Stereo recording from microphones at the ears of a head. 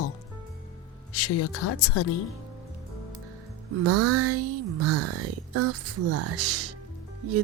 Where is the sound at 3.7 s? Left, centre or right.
Right.